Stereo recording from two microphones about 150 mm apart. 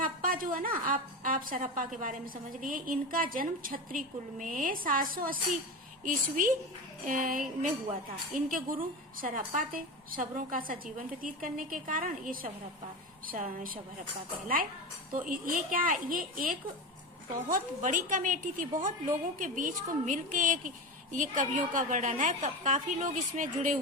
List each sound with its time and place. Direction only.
0.0 s a woman's voice: 65° right (ahead or behind)